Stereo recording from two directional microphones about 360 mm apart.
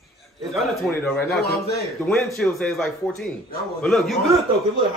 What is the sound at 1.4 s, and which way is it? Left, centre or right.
Speech, left.